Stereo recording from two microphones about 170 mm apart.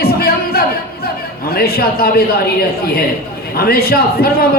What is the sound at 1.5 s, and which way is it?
A man's voice, 65° left (ahead or behind).